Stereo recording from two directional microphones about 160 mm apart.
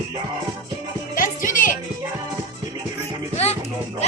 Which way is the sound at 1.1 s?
55° left (ahead or behind).